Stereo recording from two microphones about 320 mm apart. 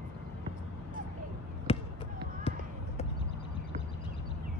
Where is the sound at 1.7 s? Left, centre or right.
Centre.